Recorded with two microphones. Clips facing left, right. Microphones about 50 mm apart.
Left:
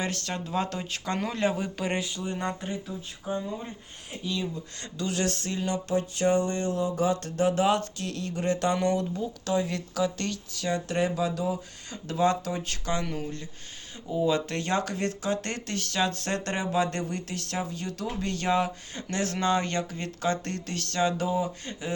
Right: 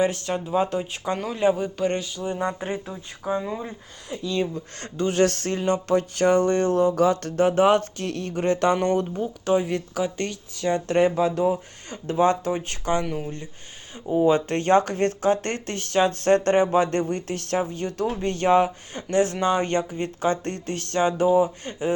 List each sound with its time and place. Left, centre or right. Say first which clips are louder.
0.0 s speech: right 8 dB; centre
2.5 s speech: right 5 dB; right
4.1 s speech: right 5 dB; right
4.4 s speech: right 7 dB; right
4.9 s speech: right 7 dB; right
5.2 s speech: right 10 dB; right
13.1 s speech: right 4 dB; centre
14.1 s speech: right 6 dB; right